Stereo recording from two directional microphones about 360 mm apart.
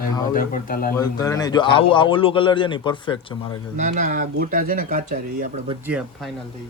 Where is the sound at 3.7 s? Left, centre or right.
Right.